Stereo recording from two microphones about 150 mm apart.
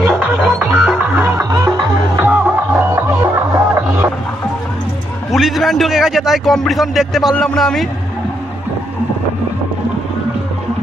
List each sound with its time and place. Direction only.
0.0 s music: 10° right (ahead or behind)
5.3 s a man's voice: centre (ahead or behind)